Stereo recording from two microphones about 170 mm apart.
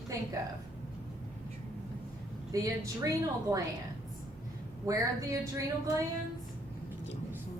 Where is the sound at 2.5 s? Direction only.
20° right (ahead or behind).